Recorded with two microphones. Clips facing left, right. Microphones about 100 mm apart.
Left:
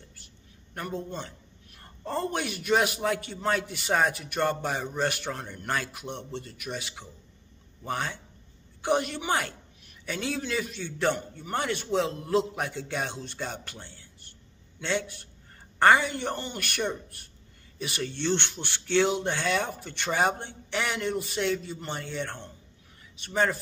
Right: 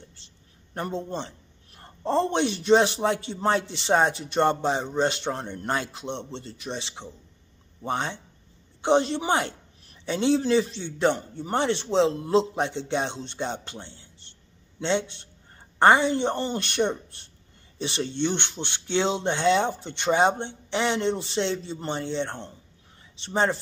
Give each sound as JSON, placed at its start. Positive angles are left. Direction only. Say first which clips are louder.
{"t": 0.2, "sound": "a woman's voice", "louder": "left 2 dB", "side_deg": -25}